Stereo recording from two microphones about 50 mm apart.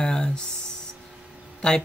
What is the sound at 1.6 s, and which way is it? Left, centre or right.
Speech, centre.